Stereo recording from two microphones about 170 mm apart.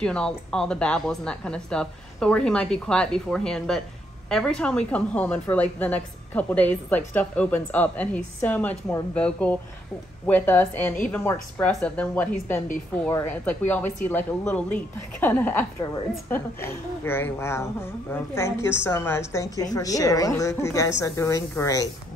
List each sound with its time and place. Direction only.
0.0 s a woman's voice: 5° left (ahead or behind)